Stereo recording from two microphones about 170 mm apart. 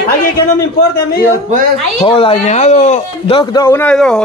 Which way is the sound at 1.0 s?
65° left (ahead or behind).